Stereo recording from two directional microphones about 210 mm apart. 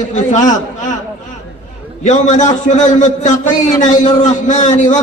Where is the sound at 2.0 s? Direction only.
35° left (ahead or behind).